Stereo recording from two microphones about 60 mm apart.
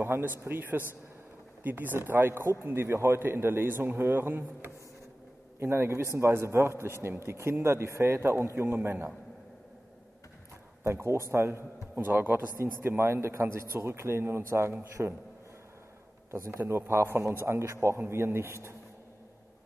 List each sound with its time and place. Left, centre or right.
0.0 s a man's voice: right
10.8 s a man's voice: right
12.1 s a man's voice: right
16.3 s a man's voice: right